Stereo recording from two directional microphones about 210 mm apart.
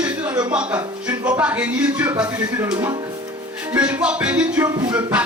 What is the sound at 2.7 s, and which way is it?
Speech, 20° right (ahead or behind).